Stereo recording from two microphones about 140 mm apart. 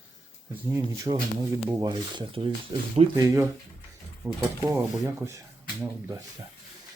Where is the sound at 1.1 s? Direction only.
40° right (ahead or behind).